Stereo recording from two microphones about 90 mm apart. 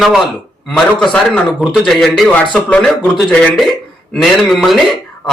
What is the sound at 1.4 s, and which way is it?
Speech, centre (ahead or behind).